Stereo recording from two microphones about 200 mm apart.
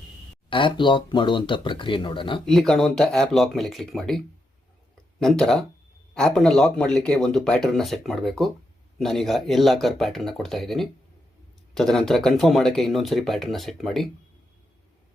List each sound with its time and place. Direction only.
0.5 s speech: 25° left (ahead or behind)
2.5 s speech: centre (ahead or behind)
5.2 s speech: centre (ahead or behind)